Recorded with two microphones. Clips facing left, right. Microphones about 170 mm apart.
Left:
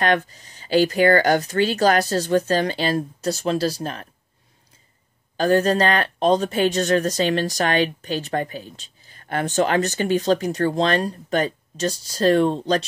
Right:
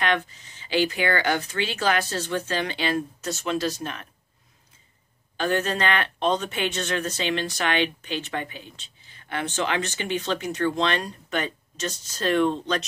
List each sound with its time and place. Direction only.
0.0 s speech: 40° left (ahead or behind)
5.4 s speech: 35° left (ahead or behind)